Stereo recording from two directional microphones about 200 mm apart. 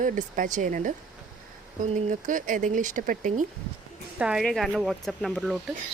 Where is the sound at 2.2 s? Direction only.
40° right (ahead or behind).